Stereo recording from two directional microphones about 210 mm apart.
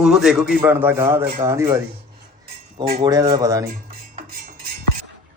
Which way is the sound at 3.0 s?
15° right (ahead or behind).